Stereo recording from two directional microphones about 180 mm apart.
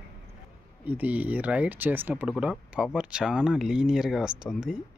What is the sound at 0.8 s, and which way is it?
Speech, 10° right (ahead or behind).